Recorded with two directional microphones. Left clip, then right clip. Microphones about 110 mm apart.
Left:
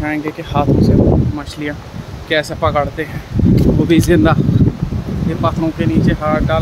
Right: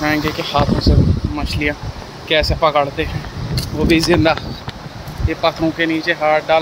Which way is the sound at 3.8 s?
65° left (ahead or behind).